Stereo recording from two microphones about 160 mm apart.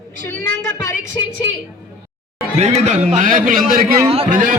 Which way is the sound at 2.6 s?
45° right (ahead or behind).